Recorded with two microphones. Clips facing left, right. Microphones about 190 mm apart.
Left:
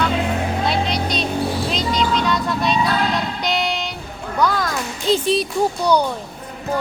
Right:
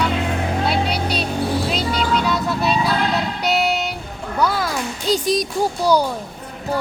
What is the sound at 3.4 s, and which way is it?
Vehicle, 5° right (ahead or behind).